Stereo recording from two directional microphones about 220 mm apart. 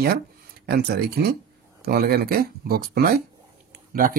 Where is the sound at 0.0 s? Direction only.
45° right (ahead or behind).